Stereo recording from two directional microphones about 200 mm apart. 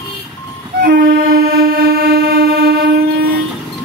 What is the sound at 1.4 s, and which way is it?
Train, 50° right (ahead or behind).